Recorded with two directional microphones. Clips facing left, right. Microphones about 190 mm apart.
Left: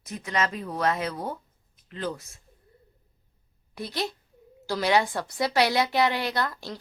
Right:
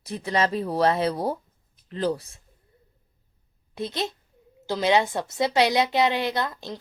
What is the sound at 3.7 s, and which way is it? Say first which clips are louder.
A woman's voice: right 2 dB; 20° right (ahead or behind).